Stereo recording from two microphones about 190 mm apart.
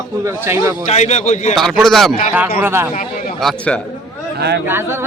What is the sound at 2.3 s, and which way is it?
Speech, 10° right (ahead or behind).